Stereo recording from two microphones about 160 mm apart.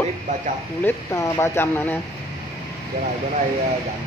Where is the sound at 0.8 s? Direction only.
15° left (ahead or behind).